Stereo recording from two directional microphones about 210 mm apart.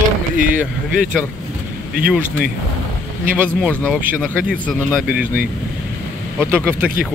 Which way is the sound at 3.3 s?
5° right (ahead or behind).